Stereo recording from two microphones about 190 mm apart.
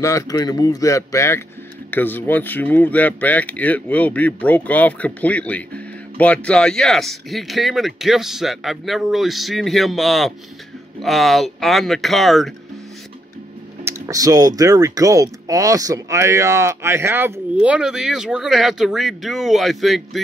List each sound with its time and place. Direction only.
0.0 s speech: 15° left (ahead or behind); by 12.5 s centre (ahead or behind)
13.8 s speech: 15° right (ahead or behind)